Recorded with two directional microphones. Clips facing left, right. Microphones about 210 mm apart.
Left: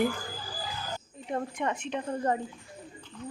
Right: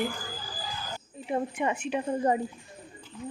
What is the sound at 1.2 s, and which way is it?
A woman's voice, 5° right (ahead or behind).